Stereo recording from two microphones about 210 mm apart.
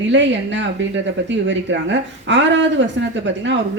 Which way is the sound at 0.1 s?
60° right (ahead or behind).